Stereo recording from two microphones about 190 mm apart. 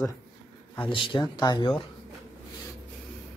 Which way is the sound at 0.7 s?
25° left (ahead or behind).